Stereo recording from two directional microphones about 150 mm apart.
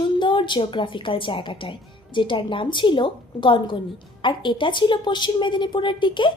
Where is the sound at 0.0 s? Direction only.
35° left (ahead or behind).